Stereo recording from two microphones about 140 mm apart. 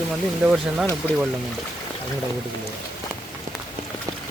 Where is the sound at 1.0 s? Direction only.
10° left (ahead or behind).